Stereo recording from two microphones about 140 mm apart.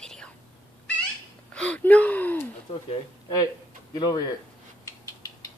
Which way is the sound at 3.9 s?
30° left (ahead or behind).